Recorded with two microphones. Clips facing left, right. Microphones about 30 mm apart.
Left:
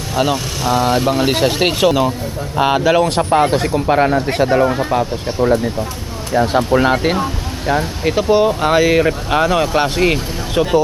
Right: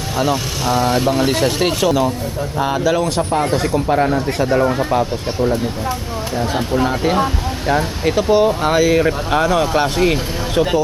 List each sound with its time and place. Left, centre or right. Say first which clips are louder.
0.6 s speech: left 2 dB; centre
2.6 s speech: left 4 dB; left
3.4 s speech: left 2 dB; centre
3.8 s speech: left 4 dB; left
4.5 s speech: right 1 dB; centre
6.3 s speech: left 6 dB; left
7.7 s speech: even; centre
8.1 s speech: left 1 dB; centre